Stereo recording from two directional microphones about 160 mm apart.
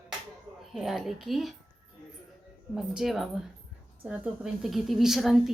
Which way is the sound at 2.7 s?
Centre (ahead or behind).